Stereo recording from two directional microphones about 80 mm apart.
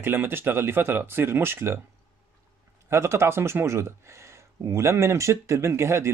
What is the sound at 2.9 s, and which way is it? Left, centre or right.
Speech, right.